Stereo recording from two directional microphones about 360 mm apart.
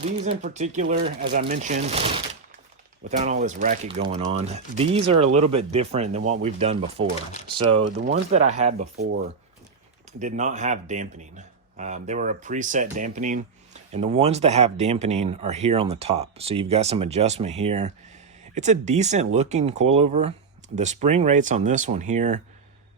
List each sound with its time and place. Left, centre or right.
0.0 s speech: centre